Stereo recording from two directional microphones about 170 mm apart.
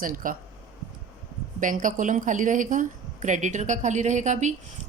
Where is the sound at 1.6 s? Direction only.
50° right (ahead or behind).